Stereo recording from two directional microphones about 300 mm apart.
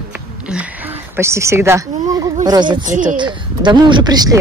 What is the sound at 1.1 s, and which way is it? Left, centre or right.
Speech, centre.